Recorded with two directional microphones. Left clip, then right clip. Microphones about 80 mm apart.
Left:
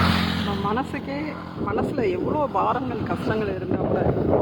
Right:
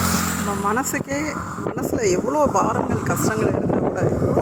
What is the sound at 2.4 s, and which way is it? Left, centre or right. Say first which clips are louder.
Speech: right 3 dB; right.